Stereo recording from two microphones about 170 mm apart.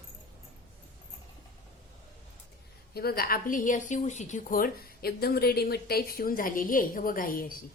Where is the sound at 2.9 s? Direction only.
65° left (ahead or behind).